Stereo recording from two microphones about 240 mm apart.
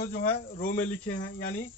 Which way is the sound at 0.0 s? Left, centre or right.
Left.